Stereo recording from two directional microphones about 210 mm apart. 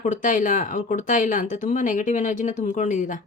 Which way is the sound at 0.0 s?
35° left (ahead or behind).